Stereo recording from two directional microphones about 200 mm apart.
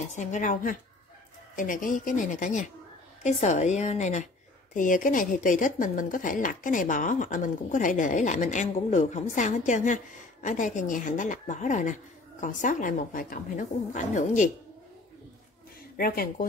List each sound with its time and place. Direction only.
0.1 s speech: 35° left (ahead or behind)
16.0 s speech: 45° left (ahead or behind)